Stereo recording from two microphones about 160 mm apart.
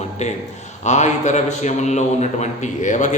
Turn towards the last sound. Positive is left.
turn(degrees=50)  # may be behind; listen again after turning